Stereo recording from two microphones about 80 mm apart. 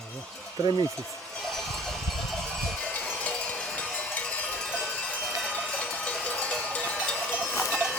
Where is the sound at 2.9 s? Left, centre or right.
Centre.